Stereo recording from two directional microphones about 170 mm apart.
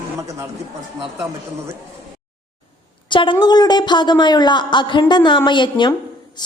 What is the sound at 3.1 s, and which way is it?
Speech, 30° left (ahead or behind).